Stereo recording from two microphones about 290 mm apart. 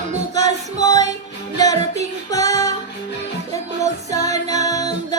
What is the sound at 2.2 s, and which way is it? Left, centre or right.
Child singing, centre.